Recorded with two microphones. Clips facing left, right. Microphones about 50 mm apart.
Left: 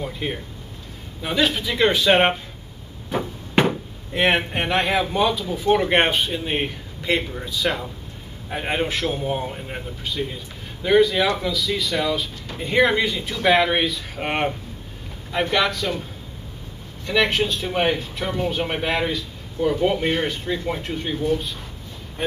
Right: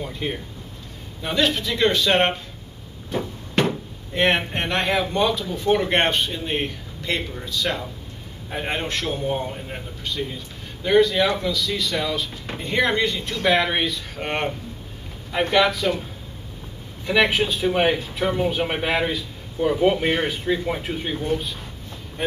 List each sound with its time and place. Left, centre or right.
0.0 s speech: centre
3.1 s a sound: left
4.1 s speech: centre
15.3 s speech: centre
17.0 s speech: centre